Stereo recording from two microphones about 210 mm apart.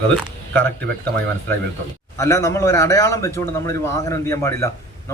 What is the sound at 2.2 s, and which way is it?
A man's voice, 15° left (ahead or behind).